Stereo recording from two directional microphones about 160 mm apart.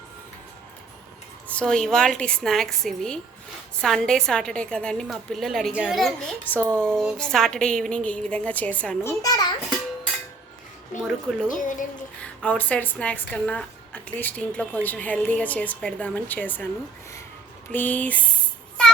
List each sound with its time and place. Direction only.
1.5 s a woman's voice: 5° left (ahead or behind)
9.0 s a child's voice: 25° left (ahead or behind)
11.0 s a woman's voice: centre (ahead or behind)
11.4 s speech: 55° left (ahead or behind)
12.2 s a woman's voice: 5° left (ahead or behind)
17.7 s a woman's voice: 10° left (ahead or behind)